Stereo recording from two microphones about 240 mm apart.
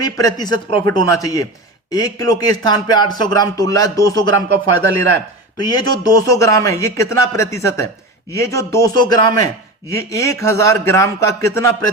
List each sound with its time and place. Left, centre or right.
0.0 s speech: centre
5.6 s speech: centre